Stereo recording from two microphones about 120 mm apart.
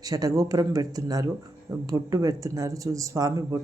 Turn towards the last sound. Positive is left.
turn(degrees=-25)  # may be behind; listen again after turning